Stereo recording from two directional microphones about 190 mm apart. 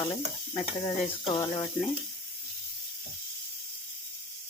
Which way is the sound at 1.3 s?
25° left (ahead or behind).